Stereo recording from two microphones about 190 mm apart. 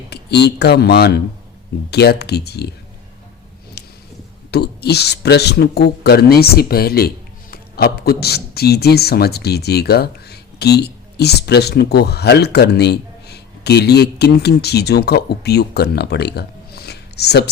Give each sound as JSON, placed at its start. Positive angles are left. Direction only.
{"t": 0.1, "sound": "speech", "side_deg": 60}
{"t": 3.8, "sound": "a sound", "side_deg": 60}
{"t": 4.5, "sound": "speech", "side_deg": 60}